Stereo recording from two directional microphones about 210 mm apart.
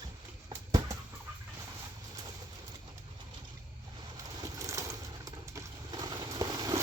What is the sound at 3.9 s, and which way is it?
Vehicle, 20° right (ahead or behind).